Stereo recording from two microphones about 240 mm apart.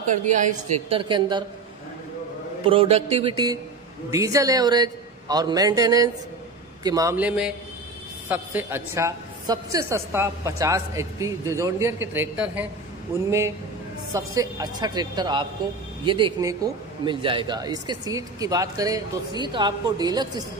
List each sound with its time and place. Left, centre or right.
0.0 s a woman's voice: right
2.6 s a woman's voice: right; by 12.6 s centre
14.1 s a man's voice: centre